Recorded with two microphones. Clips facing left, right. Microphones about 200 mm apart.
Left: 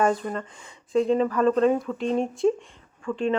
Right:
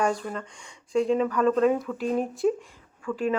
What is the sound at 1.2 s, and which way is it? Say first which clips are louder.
Speech: left 1 dB; 30° left (ahead or behind).